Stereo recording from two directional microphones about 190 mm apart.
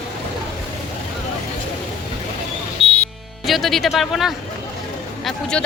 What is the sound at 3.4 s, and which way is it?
Speech, centre (ahead or behind).